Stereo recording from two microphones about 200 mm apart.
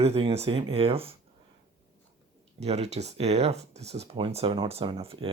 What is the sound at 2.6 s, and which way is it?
Speech, 30° right (ahead or behind).